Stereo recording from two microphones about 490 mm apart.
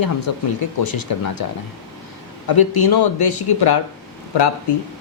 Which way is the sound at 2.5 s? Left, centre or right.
Left.